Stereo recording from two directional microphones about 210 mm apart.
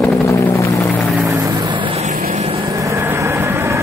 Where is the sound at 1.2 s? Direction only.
15° right (ahead or behind); by 2.4 s 40° right (ahead or behind).